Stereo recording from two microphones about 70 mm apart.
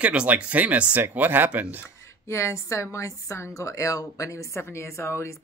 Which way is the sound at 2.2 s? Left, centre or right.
Left.